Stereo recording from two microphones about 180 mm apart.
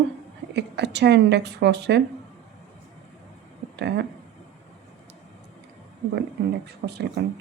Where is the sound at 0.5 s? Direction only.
70° right (ahead or behind).